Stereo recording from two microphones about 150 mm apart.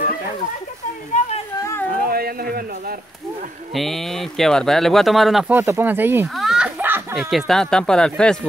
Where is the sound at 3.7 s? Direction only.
Centre (ahead or behind).